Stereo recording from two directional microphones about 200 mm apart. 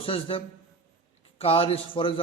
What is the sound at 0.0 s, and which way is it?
A man's voice, 25° left (ahead or behind).